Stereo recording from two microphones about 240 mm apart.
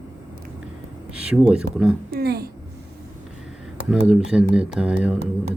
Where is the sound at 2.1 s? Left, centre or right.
Right.